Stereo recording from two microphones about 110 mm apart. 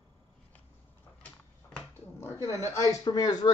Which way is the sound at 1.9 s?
20° left (ahead or behind).